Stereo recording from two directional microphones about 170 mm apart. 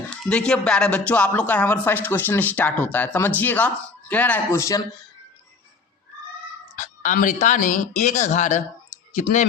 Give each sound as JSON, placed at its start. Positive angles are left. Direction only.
{"t": 0.1, "sound": "speech", "side_deg": 5}
{"t": 6.7, "sound": "speech", "side_deg": 50}